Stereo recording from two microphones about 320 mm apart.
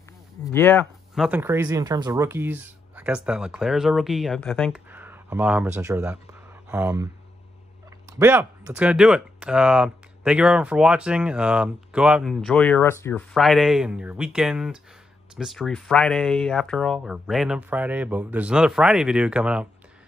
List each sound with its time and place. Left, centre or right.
0.4 s speech: centre
8.1 s speech: centre